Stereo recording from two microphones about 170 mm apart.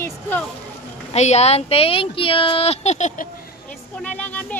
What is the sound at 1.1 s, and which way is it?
Speech, 40° left (ahead or behind).